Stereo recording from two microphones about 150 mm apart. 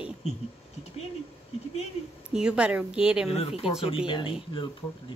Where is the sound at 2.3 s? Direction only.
5° right (ahead or behind).